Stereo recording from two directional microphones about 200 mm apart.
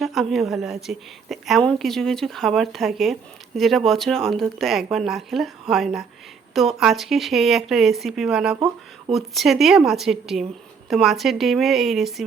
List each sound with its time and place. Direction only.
0.0 s a woman's voice: centre (ahead or behind)
8.5 s a sound: 15° right (ahead or behind)
9.1 s a woman's voice: centre (ahead or behind)